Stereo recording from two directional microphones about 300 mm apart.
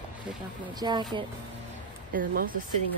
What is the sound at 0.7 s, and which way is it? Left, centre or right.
Speech, centre.